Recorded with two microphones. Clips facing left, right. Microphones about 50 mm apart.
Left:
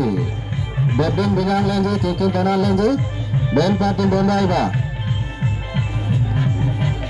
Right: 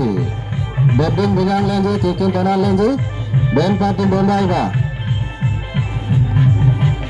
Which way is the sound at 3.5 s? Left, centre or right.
Centre.